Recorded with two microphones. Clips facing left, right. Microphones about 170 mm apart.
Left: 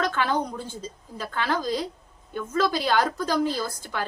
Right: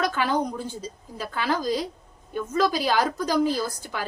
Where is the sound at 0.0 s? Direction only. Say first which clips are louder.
Right 1 dB; 10° right (ahead or behind).